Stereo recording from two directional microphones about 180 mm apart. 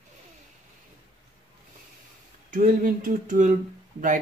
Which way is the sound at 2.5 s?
50° right (ahead or behind).